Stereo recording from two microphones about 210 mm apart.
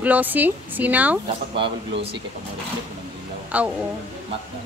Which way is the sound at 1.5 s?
25° right (ahead or behind).